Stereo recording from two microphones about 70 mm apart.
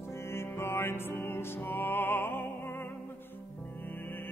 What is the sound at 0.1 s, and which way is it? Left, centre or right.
Music, left.